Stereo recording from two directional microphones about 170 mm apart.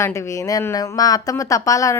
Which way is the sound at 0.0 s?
20° left (ahead or behind).